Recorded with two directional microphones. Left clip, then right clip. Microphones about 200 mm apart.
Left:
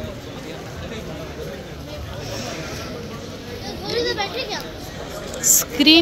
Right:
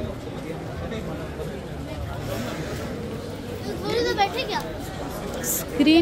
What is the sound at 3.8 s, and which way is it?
Speech, 65° right (ahead or behind).